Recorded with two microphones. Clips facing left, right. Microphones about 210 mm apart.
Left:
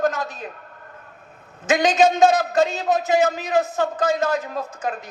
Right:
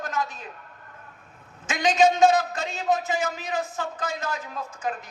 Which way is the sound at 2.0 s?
40° left (ahead or behind).